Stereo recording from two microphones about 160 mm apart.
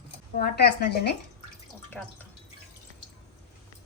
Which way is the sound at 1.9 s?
10° left (ahead or behind).